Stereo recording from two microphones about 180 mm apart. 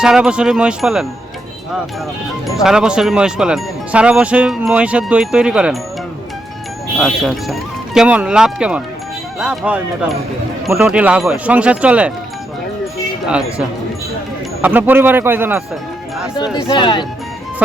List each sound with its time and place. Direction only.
0.0 s speech: 5° right (ahead or behind)
2.6 s speech: 5° right (ahead or behind)
7.0 s speech: centre (ahead or behind)
13.2 s speech: 5° right (ahead or behind)
16.6 s speech: 25° left (ahead or behind)